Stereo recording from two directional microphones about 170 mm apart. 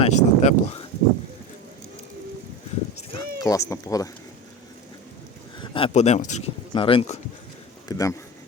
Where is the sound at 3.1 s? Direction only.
20° left (ahead or behind).